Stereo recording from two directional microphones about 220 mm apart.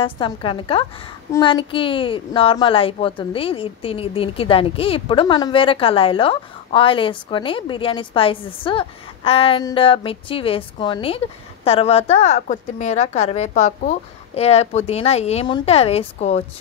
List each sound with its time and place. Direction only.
0.0 s speech: 25° left (ahead or behind)